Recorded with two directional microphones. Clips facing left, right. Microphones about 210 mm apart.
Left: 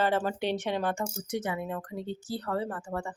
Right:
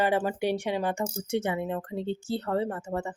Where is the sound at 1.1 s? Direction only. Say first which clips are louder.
Right 4 dB; 30° right (ahead or behind).